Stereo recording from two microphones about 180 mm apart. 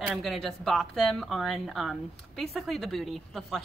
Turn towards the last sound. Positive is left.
turn(degrees=0)  # may be behind; listen again after turning